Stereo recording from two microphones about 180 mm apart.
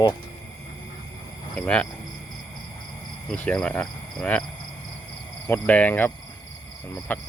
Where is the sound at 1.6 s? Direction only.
5° left (ahead or behind).